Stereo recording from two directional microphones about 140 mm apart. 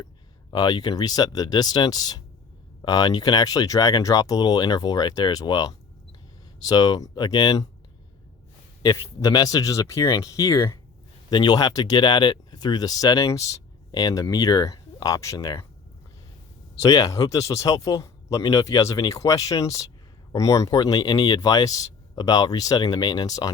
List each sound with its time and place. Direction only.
0.5 s speech: 30° left (ahead or behind)
9.0 s speech: 25° left (ahead or behind)
16.8 s speech: 25° left (ahead or behind)